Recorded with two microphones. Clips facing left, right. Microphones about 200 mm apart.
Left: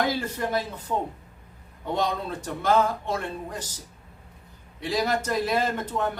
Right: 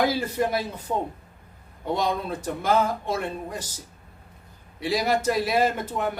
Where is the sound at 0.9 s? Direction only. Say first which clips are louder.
Right 1 dB; 20° right (ahead or behind).